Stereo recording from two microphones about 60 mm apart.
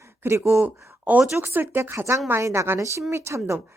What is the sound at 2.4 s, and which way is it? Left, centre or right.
Speech, right.